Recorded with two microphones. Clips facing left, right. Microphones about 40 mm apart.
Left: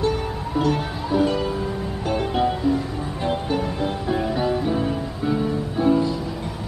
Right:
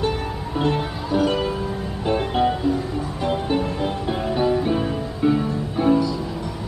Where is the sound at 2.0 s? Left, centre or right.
Centre.